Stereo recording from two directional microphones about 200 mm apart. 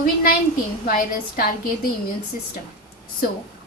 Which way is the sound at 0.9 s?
45° left (ahead or behind).